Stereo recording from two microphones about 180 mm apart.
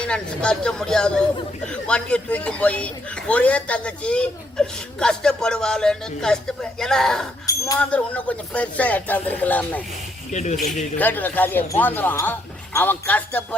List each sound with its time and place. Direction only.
0.0 s a man's voice: 5° left (ahead or behind)
10.3 s speech: 40° left (ahead or behind)
10.9 s speech: 10° left (ahead or behind)